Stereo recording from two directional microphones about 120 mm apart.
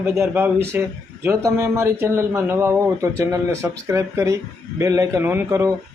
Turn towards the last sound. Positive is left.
turn(degrees=-25)  # may be behind; listen again after turning